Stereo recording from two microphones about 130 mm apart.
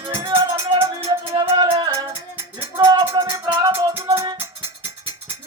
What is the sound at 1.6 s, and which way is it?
Music, 35° right (ahead or behind).